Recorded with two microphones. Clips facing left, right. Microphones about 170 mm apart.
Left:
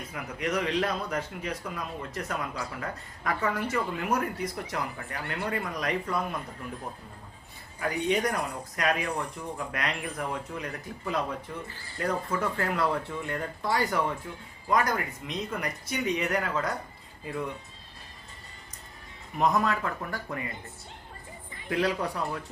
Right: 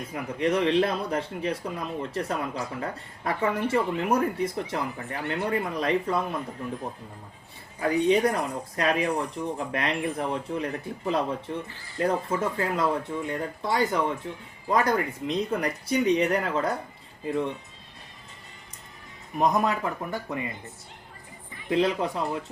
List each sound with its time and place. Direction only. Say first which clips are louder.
0.1 s a man's voice: right 6 dB; 30° right (ahead or behind)
7.8 s a man's voice: right 6 dB; 30° right (ahead or behind)
14.7 s speech: right 3 dB; 30° right (ahead or behind)
19.4 s a man's voice: right 2 dB; 20° right (ahead or behind)
21.7 s a man's voice: right 4 dB; 20° right (ahead or behind)